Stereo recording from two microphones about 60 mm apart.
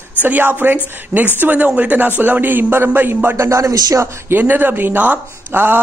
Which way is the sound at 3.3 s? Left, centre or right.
Right.